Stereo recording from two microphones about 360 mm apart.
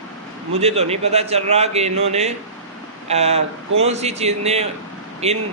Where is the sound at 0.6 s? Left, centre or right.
Centre.